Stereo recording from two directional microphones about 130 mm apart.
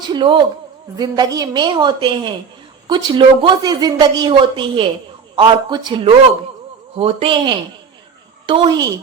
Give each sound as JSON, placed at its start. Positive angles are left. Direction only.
{"t": 0.1, "sound": "a woman's voice", "side_deg": -40}
{"t": 6.9, "sound": "a man's voice", "side_deg": -50}